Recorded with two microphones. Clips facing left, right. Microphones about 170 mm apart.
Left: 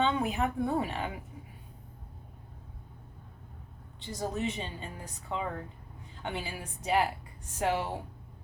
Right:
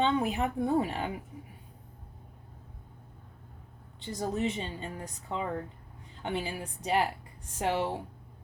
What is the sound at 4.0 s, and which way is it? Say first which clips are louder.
Speech: right 2 dB; 35° right (ahead or behind).